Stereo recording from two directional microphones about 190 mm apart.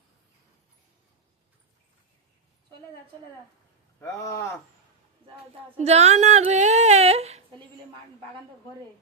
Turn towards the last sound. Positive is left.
turn(degrees=-35)  # may be behind; listen again after turning